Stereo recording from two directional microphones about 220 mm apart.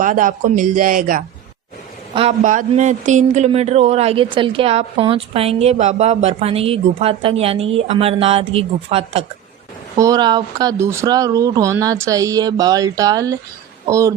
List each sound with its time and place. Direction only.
0.0 s speech: 35° right (ahead or behind)
10.0 s speech: 20° right (ahead or behind)